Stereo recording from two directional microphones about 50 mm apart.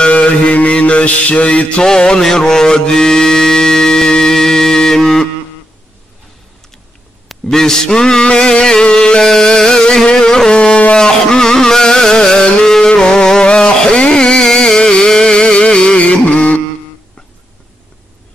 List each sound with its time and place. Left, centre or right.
0.0 s mantra: left
7.2 s mantra: centre; by 16.6 s left